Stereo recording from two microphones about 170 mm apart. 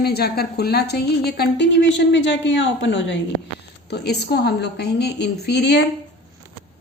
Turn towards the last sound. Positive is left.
turn(degrees=85)